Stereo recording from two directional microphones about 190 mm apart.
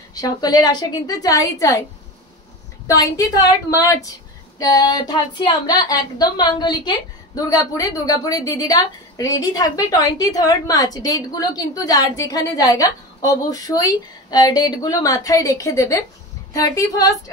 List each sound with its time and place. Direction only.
0.1 s a woman's voice: 20° left (ahead or behind)
2.9 s a woman's voice: 20° left (ahead or behind)